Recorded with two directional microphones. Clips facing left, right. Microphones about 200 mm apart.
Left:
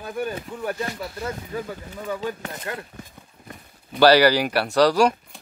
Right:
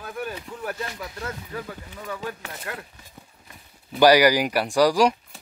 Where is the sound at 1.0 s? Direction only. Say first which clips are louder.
Left 3 dB; 10° left (ahead or behind).